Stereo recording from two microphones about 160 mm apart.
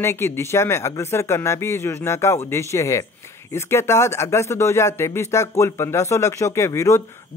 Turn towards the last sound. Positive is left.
turn(degrees=20)  # may be behind; listen again after turning